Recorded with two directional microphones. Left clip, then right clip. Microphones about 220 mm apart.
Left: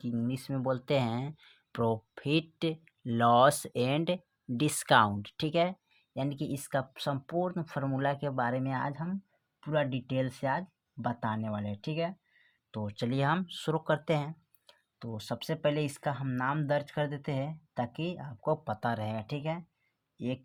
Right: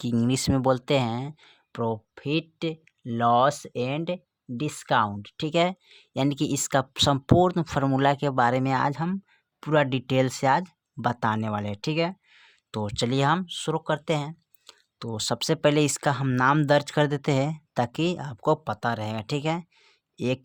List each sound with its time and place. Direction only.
0.0 s speech: 35° right (ahead or behind)
14.9 s speech: 40° right (ahead or behind)